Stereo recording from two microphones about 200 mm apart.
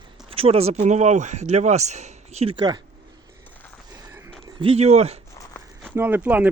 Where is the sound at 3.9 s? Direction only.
15° right (ahead or behind).